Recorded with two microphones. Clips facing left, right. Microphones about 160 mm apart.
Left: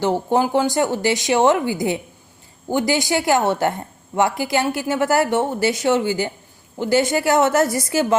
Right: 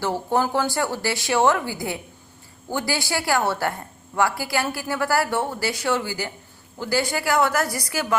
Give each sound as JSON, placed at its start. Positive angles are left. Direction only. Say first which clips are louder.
{"t": 0.0, "sound": "a woman's voice", "louder": "left 4 dB", "side_deg": 20}